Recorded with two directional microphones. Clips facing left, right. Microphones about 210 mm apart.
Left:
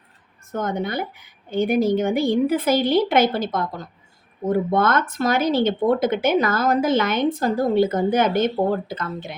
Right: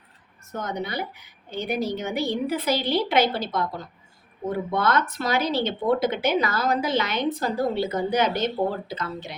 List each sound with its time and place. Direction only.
0.5 s speech: 50° left (ahead or behind)